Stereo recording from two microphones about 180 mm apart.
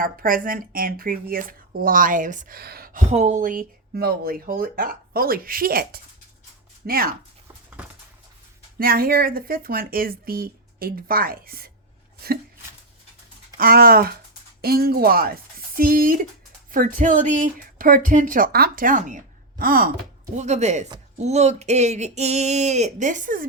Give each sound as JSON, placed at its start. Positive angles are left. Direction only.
{"t": 0.0, "sound": "speech", "side_deg": -50}
{"t": 3.1, "sound": "a woman's voice", "side_deg": -40}
{"t": 8.8, "sound": "a woman's voice", "side_deg": -55}
{"t": 13.6, "sound": "a woman's voice", "side_deg": -55}
{"t": 20.3, "sound": "speech", "side_deg": -40}